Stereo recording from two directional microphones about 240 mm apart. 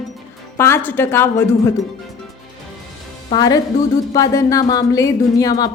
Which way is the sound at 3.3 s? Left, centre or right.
Centre.